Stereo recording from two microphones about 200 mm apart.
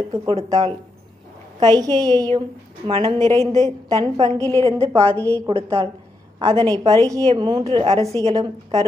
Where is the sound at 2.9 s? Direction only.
25° right (ahead or behind).